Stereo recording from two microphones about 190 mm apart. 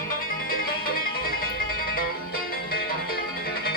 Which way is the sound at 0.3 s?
50° left (ahead or behind).